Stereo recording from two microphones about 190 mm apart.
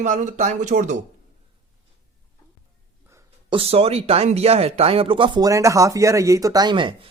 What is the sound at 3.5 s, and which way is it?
Speech, 30° right (ahead or behind).